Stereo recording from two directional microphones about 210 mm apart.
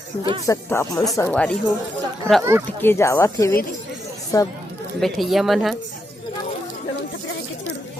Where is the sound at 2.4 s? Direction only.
10° right (ahead or behind).